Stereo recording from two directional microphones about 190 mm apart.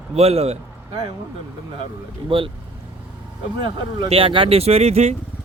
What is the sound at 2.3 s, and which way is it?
Speech, 25° right (ahead or behind).